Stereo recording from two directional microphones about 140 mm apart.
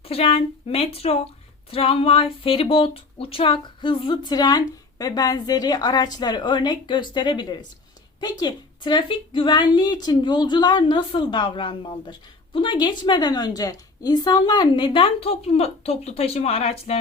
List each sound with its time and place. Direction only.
0.0 s speech: 45° left (ahead or behind)